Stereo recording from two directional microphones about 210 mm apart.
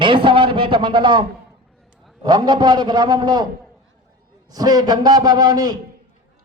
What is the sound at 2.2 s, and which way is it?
A man's voice, 20° right (ahead or behind).